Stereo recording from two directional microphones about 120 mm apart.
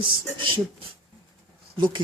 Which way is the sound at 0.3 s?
45° right (ahead or behind).